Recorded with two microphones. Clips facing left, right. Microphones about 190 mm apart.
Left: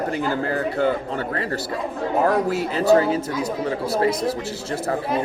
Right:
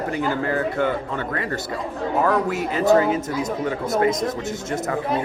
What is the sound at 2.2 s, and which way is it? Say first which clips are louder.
Speech: left 1 dB; 35° left (ahead or behind).